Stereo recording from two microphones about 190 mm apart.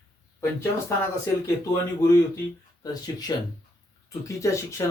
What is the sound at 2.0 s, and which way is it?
Speech, 15° left (ahead or behind).